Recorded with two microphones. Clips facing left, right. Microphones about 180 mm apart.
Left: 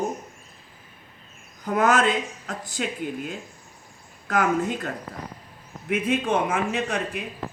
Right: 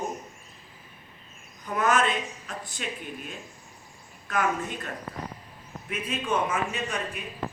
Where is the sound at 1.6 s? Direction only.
85° left.